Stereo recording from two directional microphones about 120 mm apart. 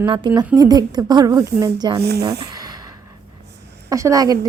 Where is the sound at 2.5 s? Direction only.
30° right (ahead or behind).